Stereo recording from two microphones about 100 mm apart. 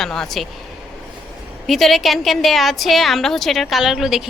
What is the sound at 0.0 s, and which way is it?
Speech, 5° left (ahead or behind).